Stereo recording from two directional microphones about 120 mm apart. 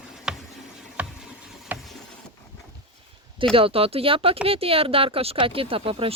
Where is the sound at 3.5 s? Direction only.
50° right (ahead or behind).